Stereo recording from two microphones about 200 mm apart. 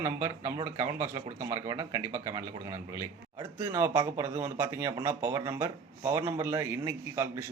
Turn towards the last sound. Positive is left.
turn(degrees=-15)  # may be behind; listen again after turning